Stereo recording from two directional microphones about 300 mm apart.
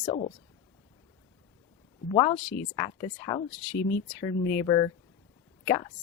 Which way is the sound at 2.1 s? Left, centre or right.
Centre.